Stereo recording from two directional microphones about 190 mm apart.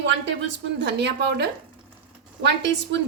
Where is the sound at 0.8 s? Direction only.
65° right (ahead or behind).